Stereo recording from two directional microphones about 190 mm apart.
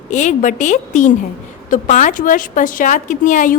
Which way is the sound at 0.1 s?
40° left (ahead or behind).